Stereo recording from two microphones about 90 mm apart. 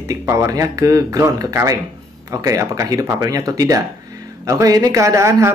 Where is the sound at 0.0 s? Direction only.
35° right (ahead or behind).